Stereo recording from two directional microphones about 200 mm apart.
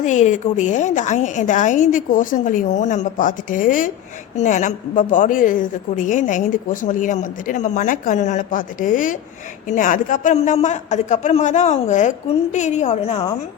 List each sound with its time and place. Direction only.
0.0 s a woman's voice: 35° left (ahead or behind)